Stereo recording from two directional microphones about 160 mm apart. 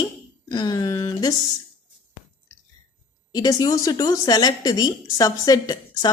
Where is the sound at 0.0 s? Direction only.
25° left (ahead or behind).